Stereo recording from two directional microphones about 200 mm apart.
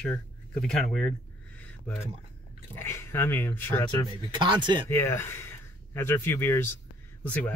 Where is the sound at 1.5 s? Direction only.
10° left (ahead or behind).